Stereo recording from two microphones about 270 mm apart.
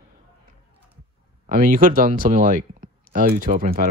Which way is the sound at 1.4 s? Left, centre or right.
Right.